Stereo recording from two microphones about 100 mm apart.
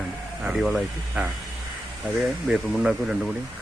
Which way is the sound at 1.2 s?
15° right (ahead or behind).